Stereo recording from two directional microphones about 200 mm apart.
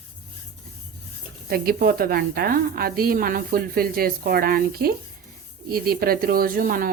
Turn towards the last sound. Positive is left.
turn(degrees=-45)  # may be behind; listen again after turning